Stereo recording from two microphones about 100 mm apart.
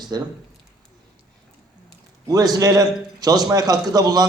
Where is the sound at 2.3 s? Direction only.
40° right (ahead or behind).